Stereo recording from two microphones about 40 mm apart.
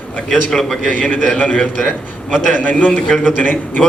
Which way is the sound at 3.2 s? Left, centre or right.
Centre.